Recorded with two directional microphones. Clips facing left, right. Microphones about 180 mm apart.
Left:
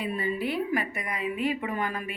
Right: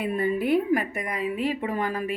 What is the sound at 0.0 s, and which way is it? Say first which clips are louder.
A woman's voice: right 4 dB; 50° right (ahead or behind).